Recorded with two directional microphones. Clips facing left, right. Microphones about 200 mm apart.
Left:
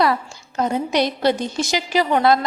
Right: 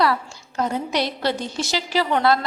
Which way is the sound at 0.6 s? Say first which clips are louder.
Left 3 dB; 20° left (ahead or behind).